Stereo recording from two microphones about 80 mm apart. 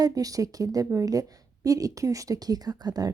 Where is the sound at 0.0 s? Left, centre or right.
Right.